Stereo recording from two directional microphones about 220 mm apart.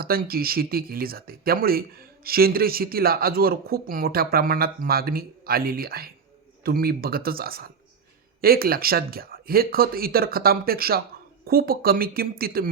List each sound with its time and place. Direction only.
0.0 s speech: 45° right (ahead or behind)